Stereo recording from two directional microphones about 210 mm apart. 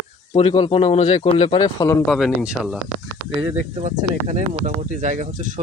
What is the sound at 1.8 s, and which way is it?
Speech, 15° left (ahead or behind).